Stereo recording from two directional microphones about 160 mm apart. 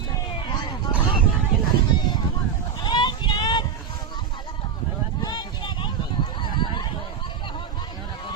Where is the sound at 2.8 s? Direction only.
30° left (ahead or behind).